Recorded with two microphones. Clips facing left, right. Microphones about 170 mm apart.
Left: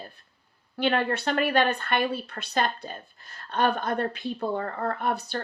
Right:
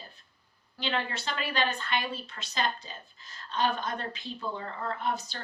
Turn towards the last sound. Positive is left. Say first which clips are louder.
# left 5 dB
turn(degrees=60)  # may be behind; listen again after turning